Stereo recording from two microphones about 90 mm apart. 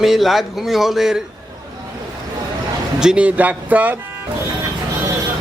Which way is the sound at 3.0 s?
10° right (ahead or behind).